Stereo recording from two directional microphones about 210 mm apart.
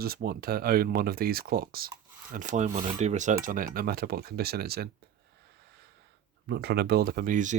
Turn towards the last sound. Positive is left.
turn(degrees=-40)  # may be behind; listen again after turning